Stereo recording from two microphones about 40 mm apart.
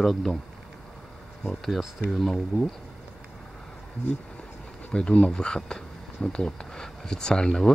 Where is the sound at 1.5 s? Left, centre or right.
Centre.